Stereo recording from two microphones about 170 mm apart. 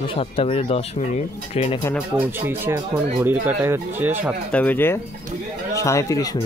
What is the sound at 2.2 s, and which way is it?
Speech, 15° right (ahead or behind).